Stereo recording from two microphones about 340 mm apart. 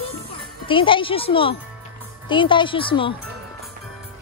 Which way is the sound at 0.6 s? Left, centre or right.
Centre.